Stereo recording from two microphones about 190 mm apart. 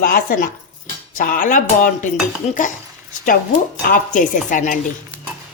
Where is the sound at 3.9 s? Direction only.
45° left (ahead or behind).